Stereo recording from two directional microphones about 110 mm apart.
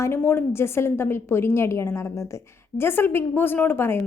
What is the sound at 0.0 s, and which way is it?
A woman's voice, 20° left (ahead or behind).